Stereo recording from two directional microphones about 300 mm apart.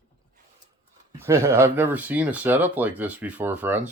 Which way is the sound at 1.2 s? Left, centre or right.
Centre.